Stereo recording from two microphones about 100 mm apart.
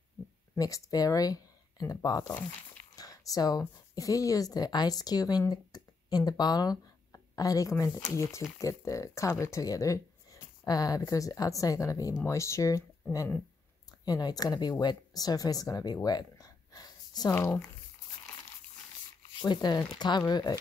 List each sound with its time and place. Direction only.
0.6 s speech: 35° left (ahead or behind)
14.0 s speech: 40° left (ahead or behind)
17.3 s speech: 25° left (ahead or behind)
19.4 s speech: 45° left (ahead or behind)